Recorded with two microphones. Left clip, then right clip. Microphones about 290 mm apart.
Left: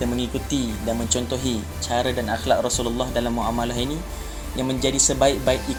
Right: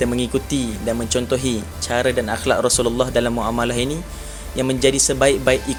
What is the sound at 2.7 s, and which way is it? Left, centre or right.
Speech, right.